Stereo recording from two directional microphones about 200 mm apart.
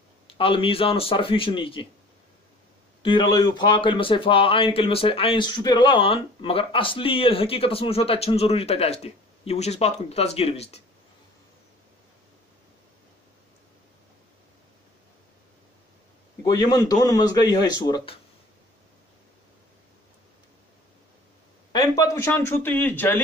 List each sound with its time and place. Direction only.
0.3 s speech: 25° left (ahead or behind)
3.0 s speech: 25° left (ahead or behind)
16.4 s speech: 20° left (ahead or behind)
21.7 s speech: 15° left (ahead or behind)